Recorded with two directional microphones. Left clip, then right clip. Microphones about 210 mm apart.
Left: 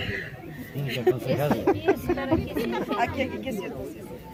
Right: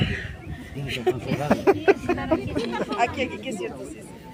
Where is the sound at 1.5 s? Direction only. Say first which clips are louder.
Right 6 dB; 50° right (ahead or behind).